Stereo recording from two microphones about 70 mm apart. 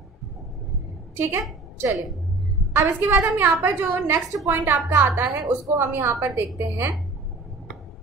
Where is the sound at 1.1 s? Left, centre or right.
Right.